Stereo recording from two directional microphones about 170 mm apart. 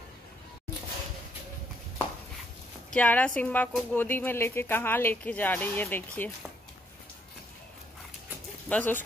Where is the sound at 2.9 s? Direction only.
10° left (ahead or behind).